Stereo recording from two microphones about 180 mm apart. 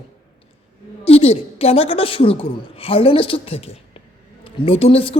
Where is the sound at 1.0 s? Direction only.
35° left (ahead or behind).